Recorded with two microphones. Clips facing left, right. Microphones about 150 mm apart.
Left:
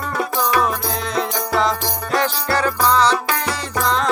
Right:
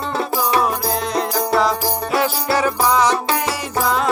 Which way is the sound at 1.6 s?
5° right (ahead or behind).